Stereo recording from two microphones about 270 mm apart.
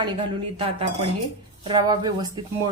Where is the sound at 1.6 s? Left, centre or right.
Centre.